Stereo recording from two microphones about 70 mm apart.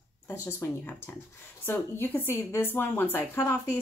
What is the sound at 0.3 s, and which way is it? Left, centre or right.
Speech, left.